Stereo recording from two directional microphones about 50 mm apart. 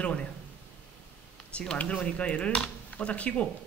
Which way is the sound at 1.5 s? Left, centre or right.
Left.